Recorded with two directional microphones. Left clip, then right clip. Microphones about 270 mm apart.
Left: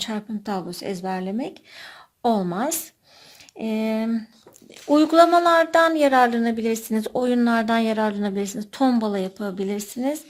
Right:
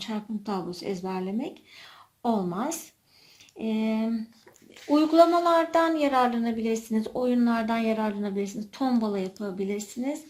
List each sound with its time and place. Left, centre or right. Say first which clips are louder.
0.0 s a woman's voice: left 5 dB; left